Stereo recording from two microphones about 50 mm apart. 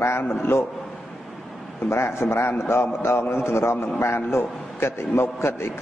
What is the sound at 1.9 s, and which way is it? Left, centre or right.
A man's voice, left.